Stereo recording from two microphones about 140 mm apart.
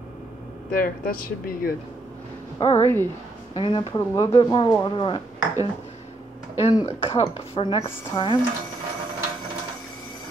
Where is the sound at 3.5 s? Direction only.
35° left (ahead or behind).